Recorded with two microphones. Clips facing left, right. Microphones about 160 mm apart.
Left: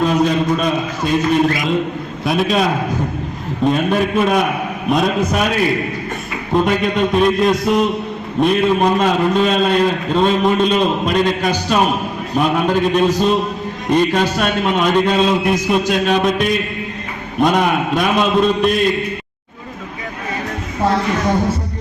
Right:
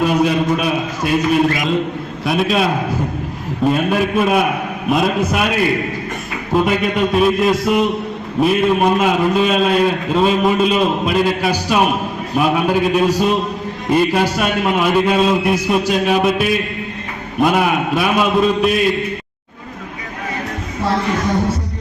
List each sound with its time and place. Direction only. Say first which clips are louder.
0.0 s a man's voice: even; 10° right (ahead or behind)